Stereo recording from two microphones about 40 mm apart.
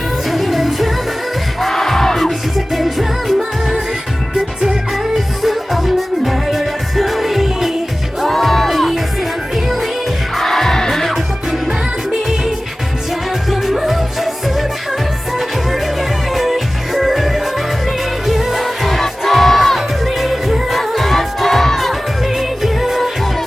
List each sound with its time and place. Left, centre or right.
0.3 s music: centre
4.9 s music: centre
10.3 s music: centre
13.5 s music: centre
22.3 s music of asia: centre